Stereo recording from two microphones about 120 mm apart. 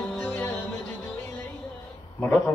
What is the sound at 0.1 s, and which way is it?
Music, 10° left (ahead or behind).